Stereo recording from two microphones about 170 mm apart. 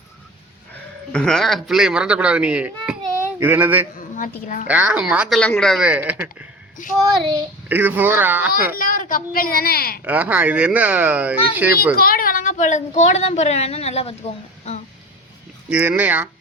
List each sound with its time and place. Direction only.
1.1 s a child's voice: 5° left (ahead or behind)
3.9 s a woman's voice: 50° left (ahead or behind)
4.6 s speech: 10° right (ahead or behind)
5.4 s a child's voice: 5° left (ahead or behind)
7.7 s speech: 10° right (ahead or behind)
8.7 s a woman's voice: 55° left (ahead or behind)
10.0 s speech: 10° right (ahead or behind)
11.9 s speech: 60° left (ahead or behind); by 14.8 s 40° left (ahead or behind)
15.7 s speech: 10° right (ahead or behind)